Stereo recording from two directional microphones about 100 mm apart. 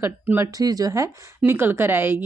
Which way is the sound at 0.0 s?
25° right (ahead or behind).